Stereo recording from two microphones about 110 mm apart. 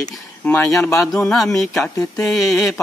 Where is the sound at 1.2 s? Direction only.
5° left (ahead or behind).